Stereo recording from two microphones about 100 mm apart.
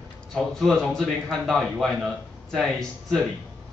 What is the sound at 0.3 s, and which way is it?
A man's voice, 5° left (ahead or behind).